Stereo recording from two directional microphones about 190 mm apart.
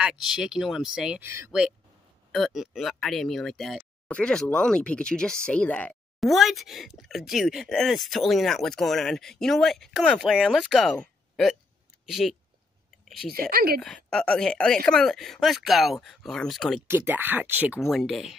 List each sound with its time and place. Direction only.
0.0 s speech: 5° right (ahead or behind)
13.5 s speech: 55° right (ahead or behind)
13.7 s speech: 5° left (ahead or behind)
16.8 s speech: 10° right (ahead or behind)